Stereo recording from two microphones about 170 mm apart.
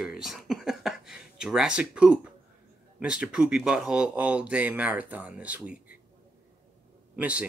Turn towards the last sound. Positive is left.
turn(degrees=-10)  # may be behind; listen again after turning